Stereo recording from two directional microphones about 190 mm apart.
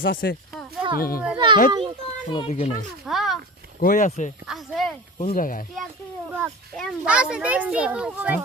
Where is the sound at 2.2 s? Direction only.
25° left (ahead or behind).